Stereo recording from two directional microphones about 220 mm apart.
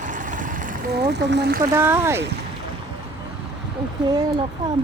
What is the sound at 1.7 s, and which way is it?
Speech, 10° right (ahead or behind).